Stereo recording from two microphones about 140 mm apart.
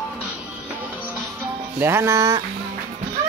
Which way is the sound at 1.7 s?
15° right (ahead or behind).